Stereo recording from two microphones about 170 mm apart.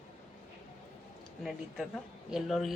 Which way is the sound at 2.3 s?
Centre (ahead or behind).